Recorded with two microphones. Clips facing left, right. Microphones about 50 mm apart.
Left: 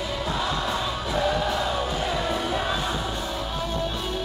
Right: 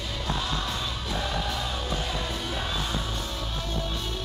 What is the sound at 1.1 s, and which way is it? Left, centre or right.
Music, centre.